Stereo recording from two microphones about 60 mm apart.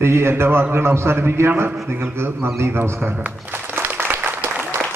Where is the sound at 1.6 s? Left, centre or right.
Right.